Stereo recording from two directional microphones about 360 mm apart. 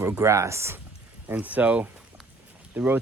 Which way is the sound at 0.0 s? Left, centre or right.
Centre.